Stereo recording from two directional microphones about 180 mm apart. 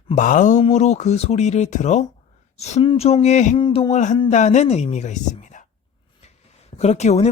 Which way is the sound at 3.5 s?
25° left (ahead or behind).